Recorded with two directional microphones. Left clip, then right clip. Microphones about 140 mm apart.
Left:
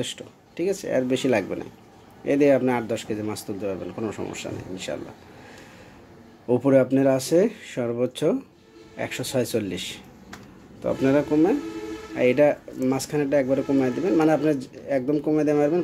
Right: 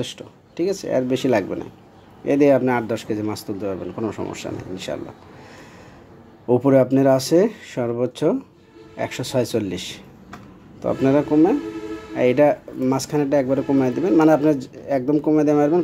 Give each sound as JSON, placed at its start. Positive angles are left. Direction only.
{"t": 0.0, "sound": "speech", "side_deg": -10}
{"t": 6.4, "sound": "speech", "side_deg": -15}